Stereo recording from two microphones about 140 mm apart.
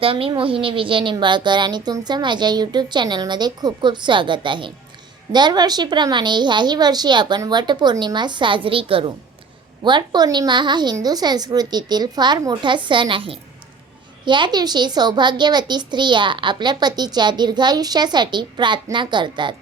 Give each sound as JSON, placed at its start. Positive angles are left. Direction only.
{"t": 0.0, "sound": "a child's voice", "side_deg": -40}